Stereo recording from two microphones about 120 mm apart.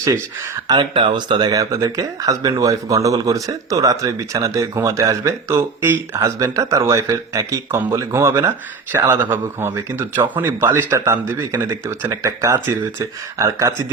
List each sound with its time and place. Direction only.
0.7 s speech: 40° right (ahead or behind); by 13.8 s 25° right (ahead or behind)